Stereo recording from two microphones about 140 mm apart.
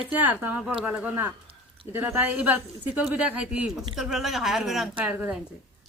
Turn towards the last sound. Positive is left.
turn(degrees=-10)  # may be behind; listen again after turning